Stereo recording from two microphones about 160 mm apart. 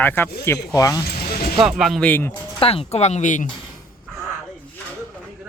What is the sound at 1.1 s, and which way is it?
Music, 70° left (ahead or behind).